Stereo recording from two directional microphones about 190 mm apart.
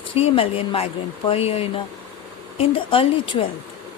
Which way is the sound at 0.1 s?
30° left (ahead or behind).